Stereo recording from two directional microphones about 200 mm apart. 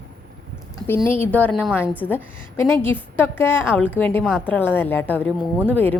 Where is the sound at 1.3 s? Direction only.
5° left (ahead or behind).